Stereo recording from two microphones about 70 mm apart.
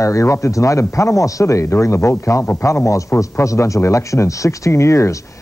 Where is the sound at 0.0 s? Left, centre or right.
Left.